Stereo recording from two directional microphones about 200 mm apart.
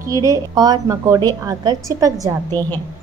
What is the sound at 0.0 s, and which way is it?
A woman's voice, 15° right (ahead or behind).